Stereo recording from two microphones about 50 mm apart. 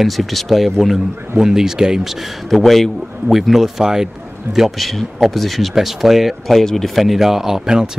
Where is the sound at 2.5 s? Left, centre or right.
Centre.